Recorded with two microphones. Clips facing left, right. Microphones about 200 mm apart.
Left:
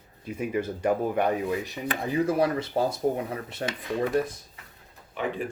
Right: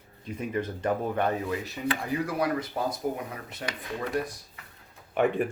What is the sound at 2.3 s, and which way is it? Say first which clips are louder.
Speech: left 4 dB; 25° left (ahead or behind).